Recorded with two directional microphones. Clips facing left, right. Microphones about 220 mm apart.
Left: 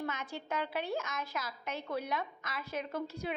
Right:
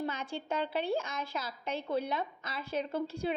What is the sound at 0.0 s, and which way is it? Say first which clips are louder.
A woman's voice: right 3 dB; 30° right (ahead or behind).